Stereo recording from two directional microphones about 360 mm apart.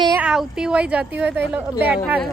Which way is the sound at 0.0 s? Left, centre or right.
Centre.